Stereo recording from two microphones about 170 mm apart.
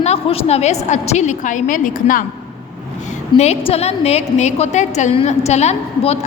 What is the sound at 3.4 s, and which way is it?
A woman's voice, 40° left (ahead or behind).